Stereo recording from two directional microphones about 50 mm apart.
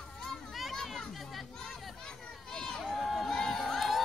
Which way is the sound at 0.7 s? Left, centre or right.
Centre.